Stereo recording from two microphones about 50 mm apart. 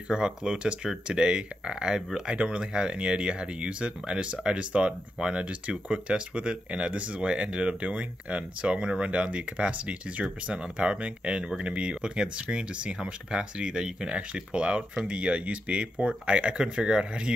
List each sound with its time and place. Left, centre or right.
0.1 s speech: centre